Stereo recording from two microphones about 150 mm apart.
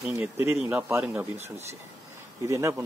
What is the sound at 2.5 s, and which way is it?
Speech, 20° right (ahead or behind).